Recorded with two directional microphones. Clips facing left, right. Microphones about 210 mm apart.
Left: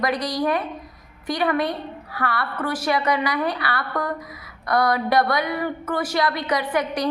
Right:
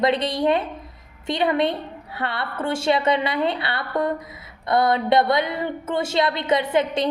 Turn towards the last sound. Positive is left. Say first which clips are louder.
# right 3 dB
turn(degrees=-25)  # may be behind; listen again after turning